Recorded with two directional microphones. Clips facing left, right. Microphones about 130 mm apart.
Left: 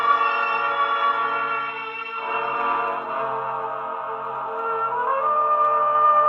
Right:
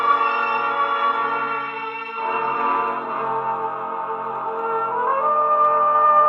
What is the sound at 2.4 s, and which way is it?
Gong, 40° right (ahead or behind).